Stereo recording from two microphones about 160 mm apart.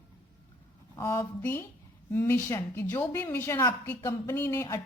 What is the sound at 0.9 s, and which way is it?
A woman's voice, 20° left (ahead or behind).